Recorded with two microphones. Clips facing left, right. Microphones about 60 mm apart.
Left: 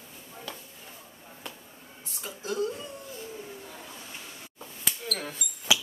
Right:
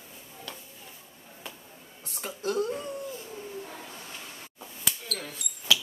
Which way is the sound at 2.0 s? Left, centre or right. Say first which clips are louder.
Right 6 dB; right.